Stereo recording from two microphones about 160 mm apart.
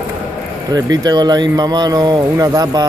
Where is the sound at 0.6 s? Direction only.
25° right (ahead or behind).